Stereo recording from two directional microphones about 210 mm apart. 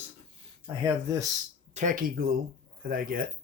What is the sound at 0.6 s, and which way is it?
Speech, 15° right (ahead or behind).